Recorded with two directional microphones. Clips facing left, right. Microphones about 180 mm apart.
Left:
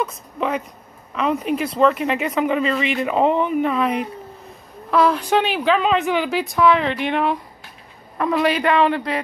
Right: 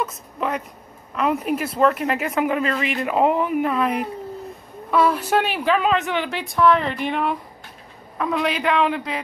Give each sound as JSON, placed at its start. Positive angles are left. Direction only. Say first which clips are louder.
{"t": 0.0, "sound": "a woman's voice", "louder": "left 2 dB", "side_deg": 0}